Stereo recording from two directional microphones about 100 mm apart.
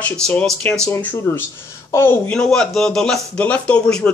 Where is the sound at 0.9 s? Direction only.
20° left (ahead or behind).